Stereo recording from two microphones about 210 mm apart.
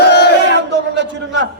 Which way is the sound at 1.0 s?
60° right (ahead or behind).